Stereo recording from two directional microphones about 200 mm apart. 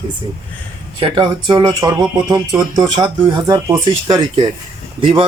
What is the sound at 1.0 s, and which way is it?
Speech, 25° right (ahead or behind).